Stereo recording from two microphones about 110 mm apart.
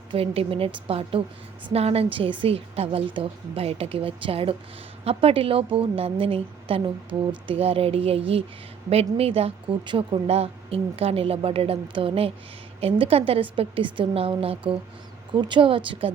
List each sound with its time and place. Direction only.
0.1 s a woman's voice: 60° right (ahead or behind)
10.2 s a woman's voice: 65° right (ahead or behind)
15.3 s speech: 45° right (ahead or behind)